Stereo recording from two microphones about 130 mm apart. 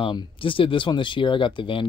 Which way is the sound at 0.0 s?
40° left (ahead or behind).